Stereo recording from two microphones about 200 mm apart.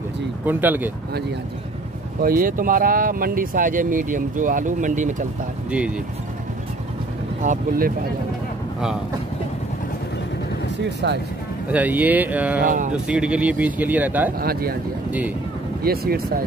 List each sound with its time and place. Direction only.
0.5 s speech: 10° right (ahead or behind)
2.2 s speech: 45° right (ahead or behind)
7.4 s speech: 45° right (ahead or behind)
11.0 s speech: 60° right (ahead or behind)
11.7 s speech: 10° right (ahead or behind)
12.6 s speech: 40° right (ahead or behind)
12.9 s speech: 5° right (ahead or behind)
14.4 s speech: 50° right (ahead or behind)
15.0 s speech: 10° right (ahead or behind)
15.8 s speech: 50° right (ahead or behind)